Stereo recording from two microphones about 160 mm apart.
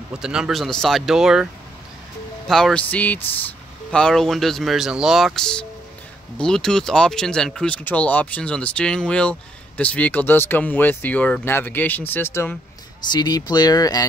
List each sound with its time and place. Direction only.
0.1 s speech: 5° right (ahead or behind); by 12.5 s 15° left (ahead or behind)
13.1 s speech: 25° left (ahead or behind)